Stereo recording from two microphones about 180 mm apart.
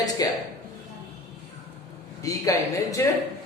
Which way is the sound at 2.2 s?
20° left (ahead or behind).